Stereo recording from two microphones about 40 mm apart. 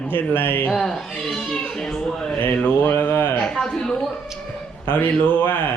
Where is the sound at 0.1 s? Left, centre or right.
Left.